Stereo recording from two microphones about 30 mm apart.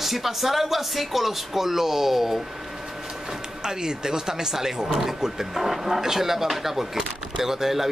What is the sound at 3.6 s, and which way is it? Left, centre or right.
Speech, right.